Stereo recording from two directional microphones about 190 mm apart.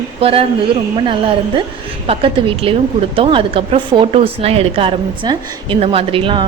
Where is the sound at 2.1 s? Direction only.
30° right (ahead or behind).